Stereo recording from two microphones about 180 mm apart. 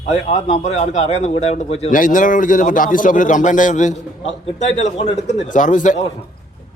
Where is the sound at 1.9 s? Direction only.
50° left (ahead or behind).